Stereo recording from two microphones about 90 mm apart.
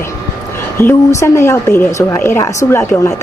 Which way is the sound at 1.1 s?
30° left (ahead or behind).